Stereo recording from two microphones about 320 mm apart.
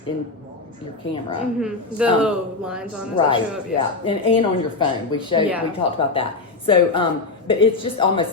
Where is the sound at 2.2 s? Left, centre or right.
Centre.